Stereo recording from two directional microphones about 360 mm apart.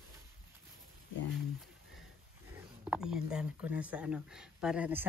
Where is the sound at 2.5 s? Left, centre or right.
Centre.